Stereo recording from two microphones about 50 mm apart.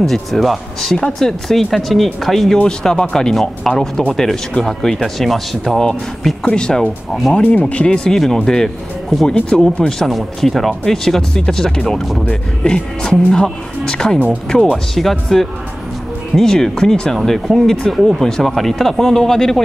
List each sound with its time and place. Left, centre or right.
0.0 s speech: centre
2.6 s speech: centre
5.8 s speech: centre